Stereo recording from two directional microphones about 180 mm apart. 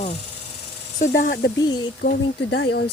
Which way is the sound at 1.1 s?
60° left (ahead or behind).